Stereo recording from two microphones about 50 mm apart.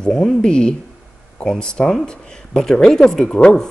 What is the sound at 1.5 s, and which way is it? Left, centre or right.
Speech, centre.